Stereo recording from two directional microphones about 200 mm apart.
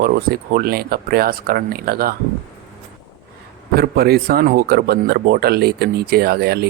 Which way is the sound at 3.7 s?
50° right (ahead or behind).